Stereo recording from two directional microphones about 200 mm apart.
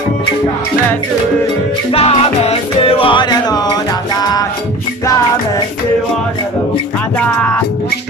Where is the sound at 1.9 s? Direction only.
30° left (ahead or behind).